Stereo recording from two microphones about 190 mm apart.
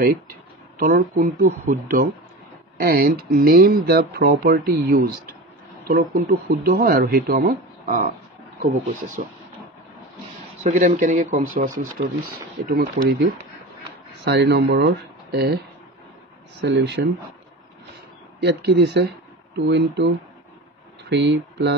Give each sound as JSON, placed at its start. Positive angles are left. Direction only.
{"t": 0.7, "sound": "speech", "side_deg": -45}
{"t": 10.6, "sound": "speech", "side_deg": -40}
{"t": 16.6, "sound": "speech", "side_deg": -65}
{"t": 18.4, "sound": "speech", "side_deg": -60}
{"t": 21.1, "sound": "speech", "side_deg": -60}